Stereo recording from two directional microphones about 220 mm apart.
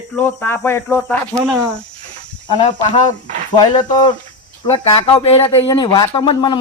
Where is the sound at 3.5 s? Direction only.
20° left (ahead or behind).